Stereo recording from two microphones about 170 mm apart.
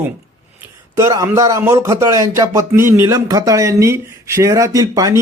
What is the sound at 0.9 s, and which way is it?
Speech, 20° right (ahead or behind).